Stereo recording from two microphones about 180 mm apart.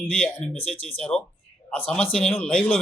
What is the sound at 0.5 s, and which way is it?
Speech, 30° left (ahead or behind).